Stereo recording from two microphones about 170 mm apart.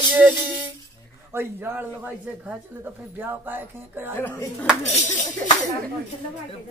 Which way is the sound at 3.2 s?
10° right (ahead or behind).